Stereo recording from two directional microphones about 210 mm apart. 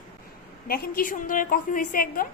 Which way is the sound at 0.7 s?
45° left (ahead or behind).